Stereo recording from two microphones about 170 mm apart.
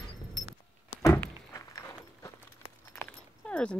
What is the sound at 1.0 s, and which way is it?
Walk, 20° left (ahead or behind).